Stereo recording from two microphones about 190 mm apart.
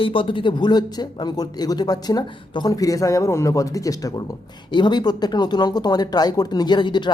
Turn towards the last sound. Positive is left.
turn(degrees=25)  # may be behind; listen again after turning